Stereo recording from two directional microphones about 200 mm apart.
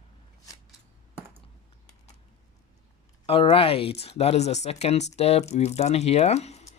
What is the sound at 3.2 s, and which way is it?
Speech, 30° left (ahead or behind).